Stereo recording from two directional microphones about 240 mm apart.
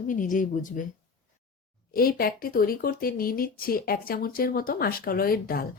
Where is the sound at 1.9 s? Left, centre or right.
Left.